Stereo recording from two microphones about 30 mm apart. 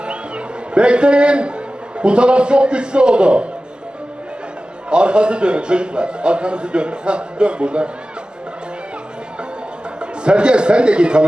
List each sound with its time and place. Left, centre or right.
0.0 s a man's voice: right
4.9 s a man's voice: right
10.0 s a man's voice: right